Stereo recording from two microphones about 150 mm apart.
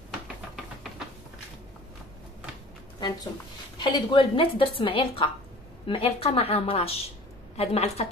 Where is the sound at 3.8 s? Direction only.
30° left (ahead or behind).